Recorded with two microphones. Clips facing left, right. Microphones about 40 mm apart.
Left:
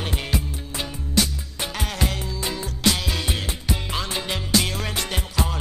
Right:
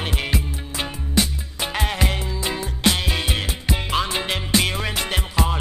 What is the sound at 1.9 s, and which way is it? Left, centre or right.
Music, right.